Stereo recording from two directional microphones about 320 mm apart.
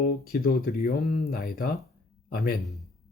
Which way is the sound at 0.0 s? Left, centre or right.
Left.